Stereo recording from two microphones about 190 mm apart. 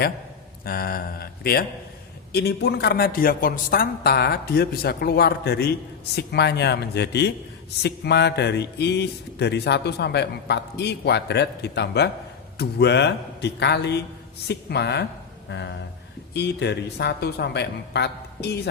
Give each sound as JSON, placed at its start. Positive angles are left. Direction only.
{"t": 0.6, "sound": "a man's voice", "side_deg": 50}